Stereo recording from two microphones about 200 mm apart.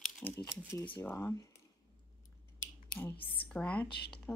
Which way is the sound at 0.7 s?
10° left (ahead or behind).